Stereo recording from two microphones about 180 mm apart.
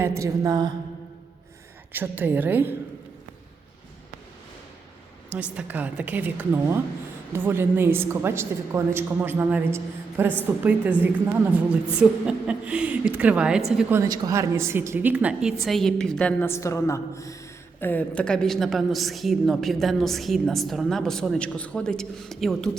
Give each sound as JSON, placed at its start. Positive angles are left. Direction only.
{"t": 0.0, "sound": "a woman's voice", "side_deg": -15}
{"t": 1.9, "sound": "a woman's voice", "side_deg": -10}
{"t": 5.3, "sound": "a woman's voice", "side_deg": -10}
{"t": 13.9, "sound": "a woman's voice", "side_deg": -20}